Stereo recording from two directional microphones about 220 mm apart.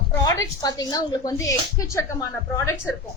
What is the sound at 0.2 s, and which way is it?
A woman's voice, 15° left (ahead or behind).